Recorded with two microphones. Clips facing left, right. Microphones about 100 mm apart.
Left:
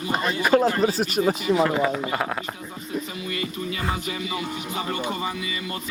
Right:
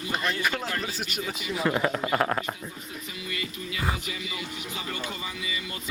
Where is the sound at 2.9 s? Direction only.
35° left (ahead or behind).